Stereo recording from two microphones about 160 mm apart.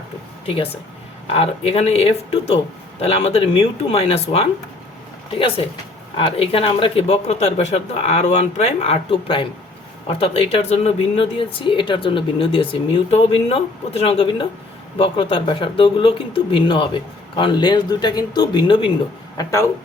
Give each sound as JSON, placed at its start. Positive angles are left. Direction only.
{"t": 0.4, "sound": "speech", "side_deg": 35}